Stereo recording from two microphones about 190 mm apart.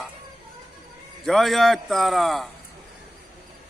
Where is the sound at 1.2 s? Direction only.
Centre (ahead or behind).